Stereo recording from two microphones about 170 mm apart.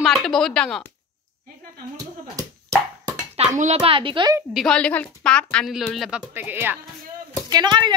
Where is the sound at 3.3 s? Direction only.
45° right (ahead or behind).